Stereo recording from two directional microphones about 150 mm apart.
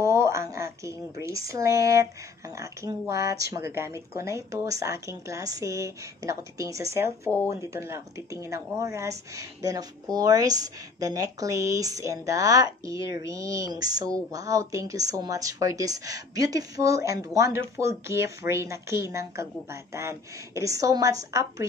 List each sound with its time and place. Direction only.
0.0 s speech: 20° right (ahead or behind)